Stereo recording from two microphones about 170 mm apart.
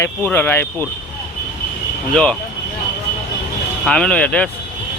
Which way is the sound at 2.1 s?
5° left (ahead or behind).